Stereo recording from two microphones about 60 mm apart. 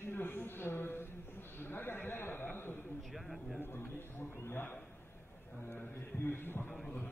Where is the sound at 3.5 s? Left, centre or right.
Left.